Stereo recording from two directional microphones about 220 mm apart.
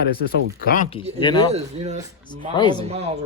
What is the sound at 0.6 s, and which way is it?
Speech, 40° left (ahead or behind).